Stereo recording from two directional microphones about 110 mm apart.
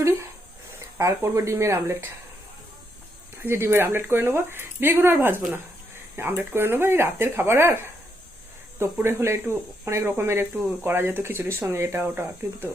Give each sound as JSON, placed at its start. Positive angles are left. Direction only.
{"t": 0.9, "sound": "speech", "side_deg": -25}
{"t": 3.4, "sound": "speech", "side_deg": -20}